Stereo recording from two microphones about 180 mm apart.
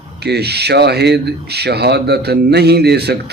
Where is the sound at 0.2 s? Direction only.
65° right (ahead or behind).